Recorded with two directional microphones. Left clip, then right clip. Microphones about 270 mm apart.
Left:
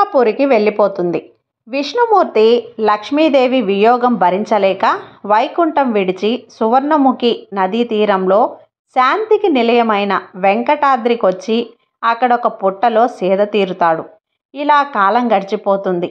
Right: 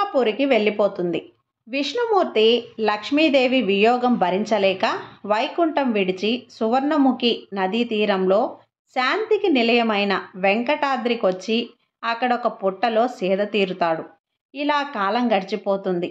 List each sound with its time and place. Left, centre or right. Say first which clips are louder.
0.0 s a woman's voice: left 8 dB; centre